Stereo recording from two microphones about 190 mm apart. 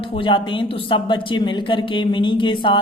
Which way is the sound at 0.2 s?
25° left (ahead or behind).